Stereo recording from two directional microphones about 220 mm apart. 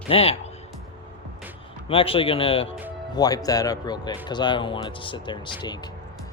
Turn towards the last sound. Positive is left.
turn(degrees=20)  # may be behind; listen again after turning